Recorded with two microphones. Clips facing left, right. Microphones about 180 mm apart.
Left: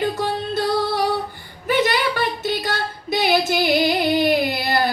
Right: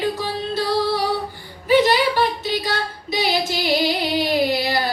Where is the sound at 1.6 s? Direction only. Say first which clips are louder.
Right 4 dB; 55° left (ahead or behind).